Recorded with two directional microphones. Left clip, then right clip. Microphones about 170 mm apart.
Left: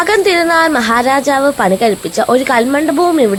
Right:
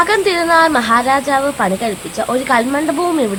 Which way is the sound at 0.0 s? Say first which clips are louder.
Left 3 dB; 15° left (ahead or behind).